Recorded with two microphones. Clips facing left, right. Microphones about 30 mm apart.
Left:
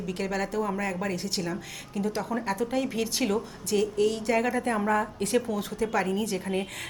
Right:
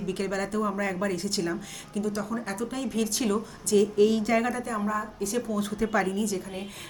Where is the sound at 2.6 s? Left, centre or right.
Centre.